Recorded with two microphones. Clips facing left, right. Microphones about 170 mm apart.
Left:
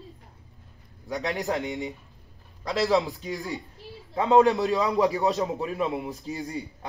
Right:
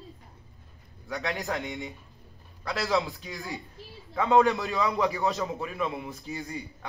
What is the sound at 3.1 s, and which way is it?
A man's voice, 35° left (ahead or behind).